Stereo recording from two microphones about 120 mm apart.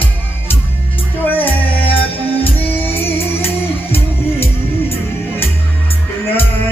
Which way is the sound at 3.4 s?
55° left (ahead or behind).